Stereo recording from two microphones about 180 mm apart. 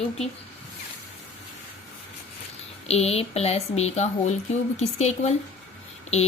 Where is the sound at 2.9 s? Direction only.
35° left (ahead or behind).